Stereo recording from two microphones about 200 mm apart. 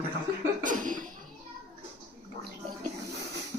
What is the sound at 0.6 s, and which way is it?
Chuckle, 40° right (ahead or behind).